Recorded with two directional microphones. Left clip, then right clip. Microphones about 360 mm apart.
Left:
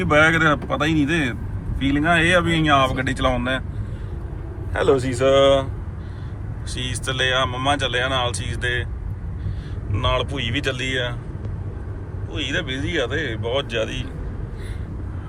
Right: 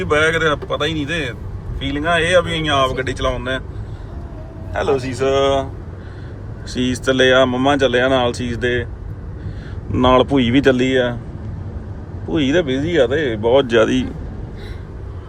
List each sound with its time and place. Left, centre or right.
0.0 s speech: centre
4.7 s speech: centre
6.7 s speech: right
9.9 s speech: right
12.3 s speech: right